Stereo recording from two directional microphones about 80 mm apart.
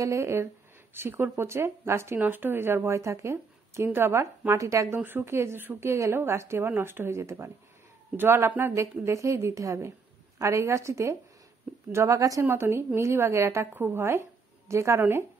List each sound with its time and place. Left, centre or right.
0.0 s speech: right
4.9 s speech: right
12.4 s speech: right